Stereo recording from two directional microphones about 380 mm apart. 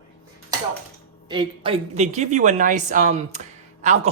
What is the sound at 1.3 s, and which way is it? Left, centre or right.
A woman's voice, centre.